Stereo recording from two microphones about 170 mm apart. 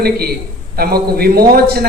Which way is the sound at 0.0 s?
65° right (ahead or behind).